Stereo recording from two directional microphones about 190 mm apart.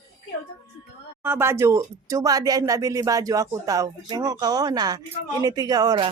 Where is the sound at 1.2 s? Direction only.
10° right (ahead or behind).